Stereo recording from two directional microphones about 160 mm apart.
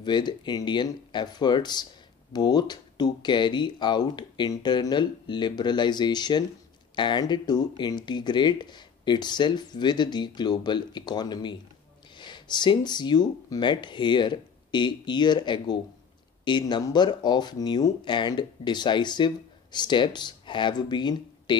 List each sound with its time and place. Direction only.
0.0 s speech: 30° left (ahead or behind)